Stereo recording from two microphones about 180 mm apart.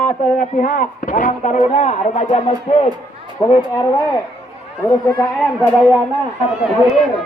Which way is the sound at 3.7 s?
20° left (ahead or behind).